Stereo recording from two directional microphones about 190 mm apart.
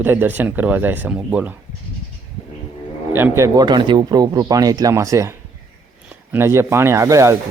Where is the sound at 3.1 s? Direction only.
10° right (ahead or behind).